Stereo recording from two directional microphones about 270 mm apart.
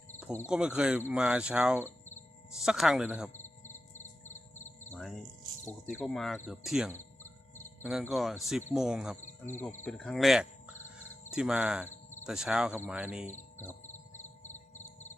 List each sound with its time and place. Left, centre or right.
0.4 s speech: centre
3.4 s cricket: left
4.9 s music: centre
5.6 s speech: centre
13.6 s insect: centre
14.1 s music: left